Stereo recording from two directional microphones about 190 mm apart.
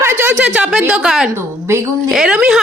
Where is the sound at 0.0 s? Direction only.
10° right (ahead or behind).